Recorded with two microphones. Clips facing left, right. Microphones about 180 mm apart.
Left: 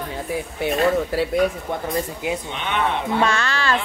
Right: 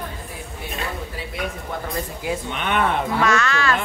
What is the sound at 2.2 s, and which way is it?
Speech, 20° left (ahead or behind).